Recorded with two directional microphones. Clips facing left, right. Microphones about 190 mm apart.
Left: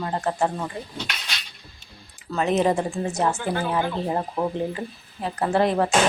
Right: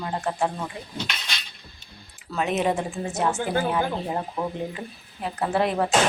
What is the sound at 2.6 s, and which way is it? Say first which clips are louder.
Speech: left 3 dB; centre (ahead or behind).